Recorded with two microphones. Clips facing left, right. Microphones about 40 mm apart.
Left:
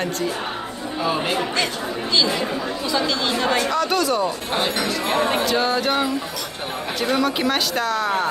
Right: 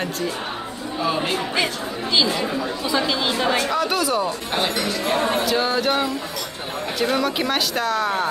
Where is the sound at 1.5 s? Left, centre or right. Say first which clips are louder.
Even; centre.